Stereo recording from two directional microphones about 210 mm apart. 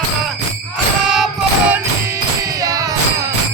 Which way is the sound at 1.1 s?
5° right (ahead or behind).